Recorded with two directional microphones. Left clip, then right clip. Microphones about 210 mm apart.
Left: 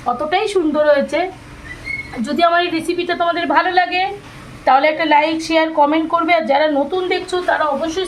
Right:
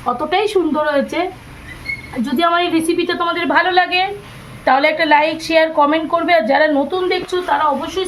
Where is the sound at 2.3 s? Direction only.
Centre (ahead or behind).